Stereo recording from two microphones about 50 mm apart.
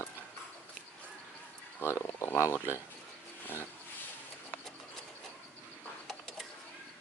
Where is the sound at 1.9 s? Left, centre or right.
Left.